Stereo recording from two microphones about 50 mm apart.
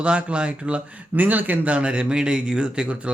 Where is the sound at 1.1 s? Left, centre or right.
Right.